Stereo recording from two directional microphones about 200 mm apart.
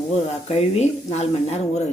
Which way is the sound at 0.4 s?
35° left (ahead or behind).